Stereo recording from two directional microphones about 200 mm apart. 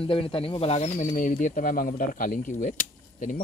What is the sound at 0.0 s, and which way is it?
Speech, 25° left (ahead or behind).